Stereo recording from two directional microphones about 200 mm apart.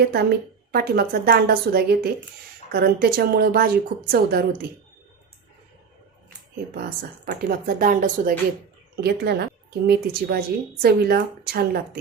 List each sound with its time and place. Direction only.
0.0 s a woman's voice: 50° right (ahead or behind)
6.7 s a woman's voice: 50° right (ahead or behind)